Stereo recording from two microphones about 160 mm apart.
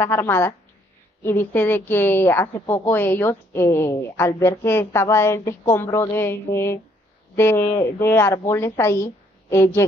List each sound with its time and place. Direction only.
0.0 s a woman's voice: 15° left (ahead or behind)